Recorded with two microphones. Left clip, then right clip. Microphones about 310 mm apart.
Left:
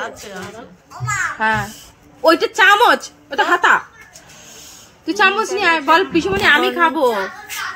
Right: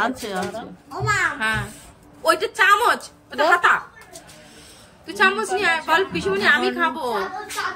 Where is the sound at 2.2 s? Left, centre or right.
Centre.